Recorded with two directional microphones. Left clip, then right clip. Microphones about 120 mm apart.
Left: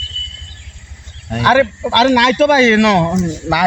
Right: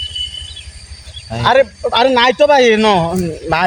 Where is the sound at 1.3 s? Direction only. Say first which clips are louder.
Right 1 dB; 30° right (ahead or behind).